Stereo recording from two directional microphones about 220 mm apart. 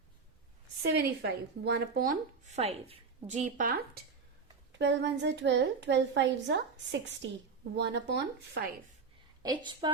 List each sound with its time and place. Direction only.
0.8 s a woman's voice: 50° right (ahead or behind)
2.6 s a woman's voice: 25° right (ahead or behind)
4.8 s a woman's voice: 55° right (ahead or behind)
9.4 s a woman's voice: 20° right (ahead or behind)